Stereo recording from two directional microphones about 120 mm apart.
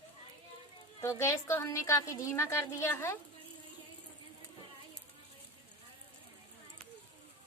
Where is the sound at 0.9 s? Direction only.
25° left (ahead or behind).